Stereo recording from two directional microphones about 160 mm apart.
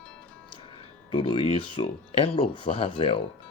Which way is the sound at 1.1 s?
35° left (ahead or behind).